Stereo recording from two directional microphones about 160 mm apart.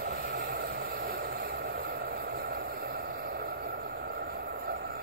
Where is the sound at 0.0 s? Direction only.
65° right (ahead or behind).